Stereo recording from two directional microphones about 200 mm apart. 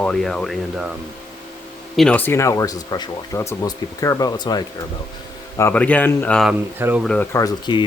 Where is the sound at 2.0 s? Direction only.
5° left (ahead or behind).